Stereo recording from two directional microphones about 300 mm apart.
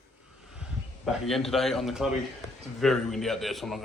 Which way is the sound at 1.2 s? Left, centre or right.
Centre.